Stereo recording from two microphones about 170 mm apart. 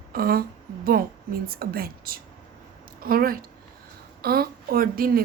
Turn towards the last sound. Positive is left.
turn(degrees=-60)  # may be behind; listen again after turning